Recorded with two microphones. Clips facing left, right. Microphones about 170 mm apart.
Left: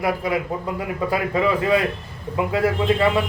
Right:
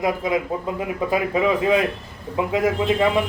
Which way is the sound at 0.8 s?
15° right (ahead or behind).